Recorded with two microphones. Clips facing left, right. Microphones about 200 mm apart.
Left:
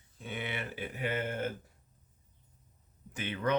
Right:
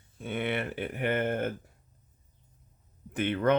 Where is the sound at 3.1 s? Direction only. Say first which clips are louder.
Right 6 dB; 55° right (ahead or behind).